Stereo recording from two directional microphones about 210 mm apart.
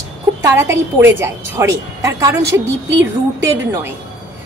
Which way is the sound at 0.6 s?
10° right (ahead or behind).